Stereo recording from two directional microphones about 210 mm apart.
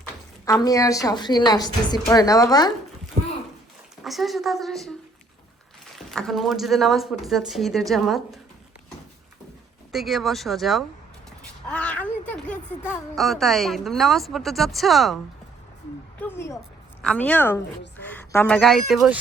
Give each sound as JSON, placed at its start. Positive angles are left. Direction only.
{"t": 0.4, "sound": "a woman's voice", "side_deg": 15}
{"t": 4.0, "sound": "speech", "side_deg": 0}
{"t": 6.0, "sound": "speech", "side_deg": 0}
{"t": 9.9, "sound": "speech", "side_deg": 0}
{"t": 16.2, "sound": "a woman's voice", "side_deg": 10}